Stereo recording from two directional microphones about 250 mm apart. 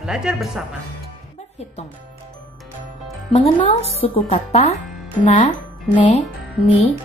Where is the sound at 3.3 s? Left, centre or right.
Left.